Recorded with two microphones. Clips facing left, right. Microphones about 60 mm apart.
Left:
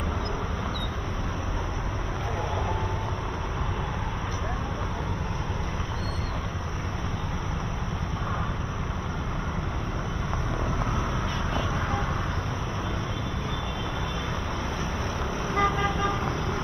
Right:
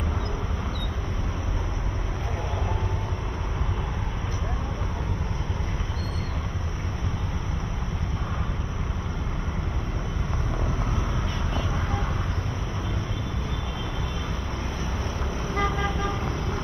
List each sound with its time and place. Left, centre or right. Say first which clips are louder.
11.5 s vehicle: left 1 dB; left
15.5 s vehicle: left 2 dB; left